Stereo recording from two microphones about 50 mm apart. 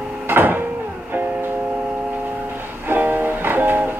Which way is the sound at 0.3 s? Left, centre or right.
Right.